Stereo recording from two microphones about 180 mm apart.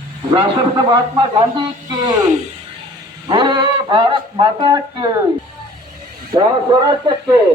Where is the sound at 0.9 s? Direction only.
30° right (ahead or behind).